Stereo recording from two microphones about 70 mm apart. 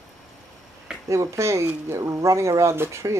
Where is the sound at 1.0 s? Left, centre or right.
Right.